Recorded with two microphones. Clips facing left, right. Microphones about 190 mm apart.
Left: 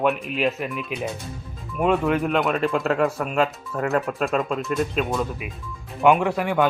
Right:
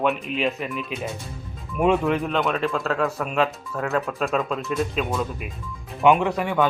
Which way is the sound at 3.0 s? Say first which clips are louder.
Left 1 dB; centre (ahead or behind).